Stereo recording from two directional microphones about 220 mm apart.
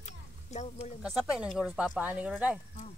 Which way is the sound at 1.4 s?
Centre (ahead or behind).